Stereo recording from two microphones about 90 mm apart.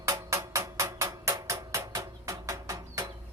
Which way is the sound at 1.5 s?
35° right (ahead or behind).